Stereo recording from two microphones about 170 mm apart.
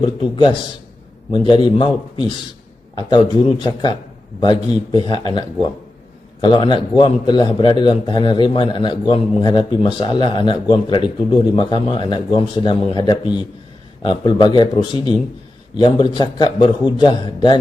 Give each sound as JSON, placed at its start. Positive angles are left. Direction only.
{"t": 0.0, "sound": "a man's voice", "side_deg": 25}